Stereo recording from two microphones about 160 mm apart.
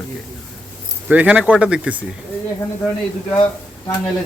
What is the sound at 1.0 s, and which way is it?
Speech, 10° right (ahead or behind).